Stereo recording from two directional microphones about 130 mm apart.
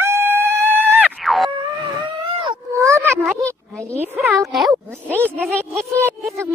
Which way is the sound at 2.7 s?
25° right (ahead or behind).